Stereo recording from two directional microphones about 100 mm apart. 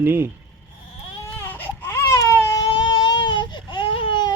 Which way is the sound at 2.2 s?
40° left (ahead or behind).